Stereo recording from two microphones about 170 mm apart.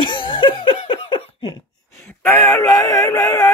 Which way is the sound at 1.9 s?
15° left (ahead or behind).